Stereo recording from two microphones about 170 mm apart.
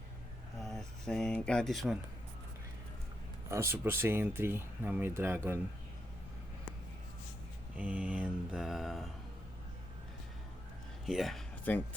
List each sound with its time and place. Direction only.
0.6 s speech: centre (ahead or behind)
3.5 s speech: 15° right (ahead or behind)
7.8 s mantra: 10° right (ahead or behind)
11.0 s a sound: centre (ahead or behind)